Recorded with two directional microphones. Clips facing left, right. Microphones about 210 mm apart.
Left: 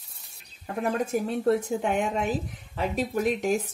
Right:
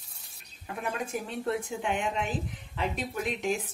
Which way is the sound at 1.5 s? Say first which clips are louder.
Left 6 dB; 45° left (ahead or behind).